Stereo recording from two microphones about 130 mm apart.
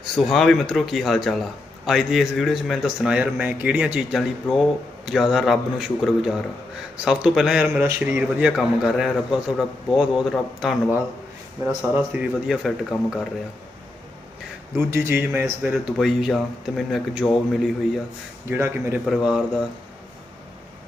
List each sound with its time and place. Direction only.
0.0 s speech: centre (ahead or behind)
14.8 s speech: 20° right (ahead or behind); by 18.0 s centre (ahead or behind)
18.4 s speech: 15° right (ahead or behind)
19.0 s speech: centre (ahead or behind)